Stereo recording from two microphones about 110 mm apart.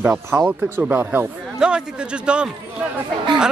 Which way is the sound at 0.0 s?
15° right (ahead or behind).